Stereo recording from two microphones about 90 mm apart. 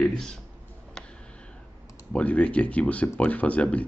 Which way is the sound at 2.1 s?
15° left (ahead or behind).